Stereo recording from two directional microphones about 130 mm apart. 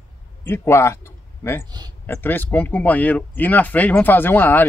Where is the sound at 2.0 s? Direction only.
15° left (ahead or behind).